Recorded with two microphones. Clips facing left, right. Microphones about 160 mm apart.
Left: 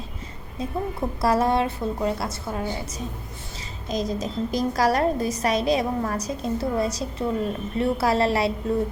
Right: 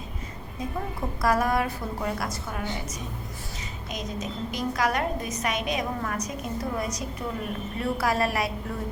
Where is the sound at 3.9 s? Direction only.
35° left (ahead or behind).